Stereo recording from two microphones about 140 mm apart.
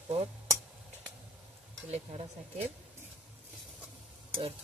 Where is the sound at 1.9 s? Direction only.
45° right (ahead or behind).